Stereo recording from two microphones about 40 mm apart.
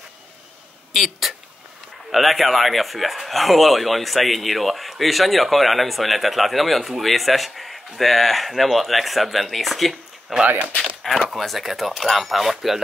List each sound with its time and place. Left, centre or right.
0.9 s a man's voice: centre